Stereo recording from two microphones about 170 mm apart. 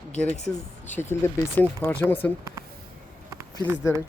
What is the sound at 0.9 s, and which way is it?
Speech, 10° left (ahead or behind).